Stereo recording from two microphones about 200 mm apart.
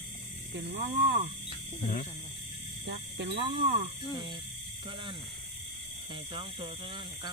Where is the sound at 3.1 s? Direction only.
55° right (ahead or behind).